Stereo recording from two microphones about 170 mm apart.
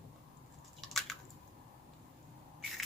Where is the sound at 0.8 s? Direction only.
Centre (ahead or behind).